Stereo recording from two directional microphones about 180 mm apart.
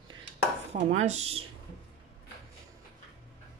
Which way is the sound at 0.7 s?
40° right (ahead or behind).